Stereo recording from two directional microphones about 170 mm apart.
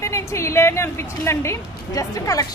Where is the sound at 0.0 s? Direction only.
15° left (ahead or behind).